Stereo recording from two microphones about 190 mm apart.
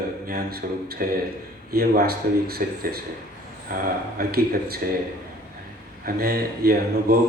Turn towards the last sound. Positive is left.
turn(degrees=-50)  # may be behind; listen again after turning